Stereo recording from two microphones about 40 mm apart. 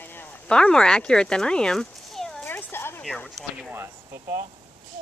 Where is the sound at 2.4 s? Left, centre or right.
Left.